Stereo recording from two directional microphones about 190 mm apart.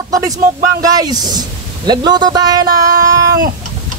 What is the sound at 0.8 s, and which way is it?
Speech, 20° right (ahead or behind).